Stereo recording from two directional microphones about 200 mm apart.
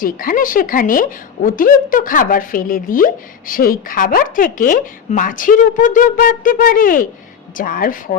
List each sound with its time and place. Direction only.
0.0 s a woman's voice: 45° left (ahead or behind)